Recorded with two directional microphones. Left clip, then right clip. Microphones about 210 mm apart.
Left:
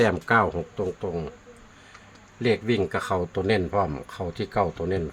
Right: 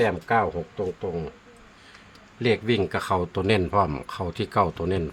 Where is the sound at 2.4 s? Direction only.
Centre (ahead or behind).